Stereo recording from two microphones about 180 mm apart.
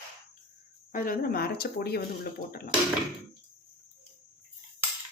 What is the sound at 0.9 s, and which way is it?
Speech, 50° left (ahead or behind).